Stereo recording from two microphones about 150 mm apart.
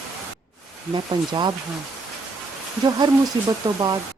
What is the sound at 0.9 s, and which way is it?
Speech, 30° right (ahead or behind).